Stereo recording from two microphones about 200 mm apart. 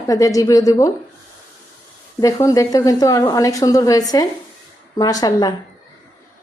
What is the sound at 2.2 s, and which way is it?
A woman's voice, 15° left (ahead or behind).